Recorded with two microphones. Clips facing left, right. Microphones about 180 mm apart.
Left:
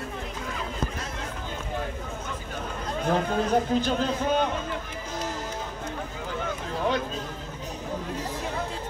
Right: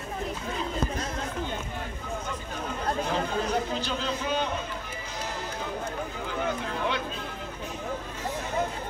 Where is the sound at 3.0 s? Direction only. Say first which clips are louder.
Left 8 dB; 50° left (ahead or behind).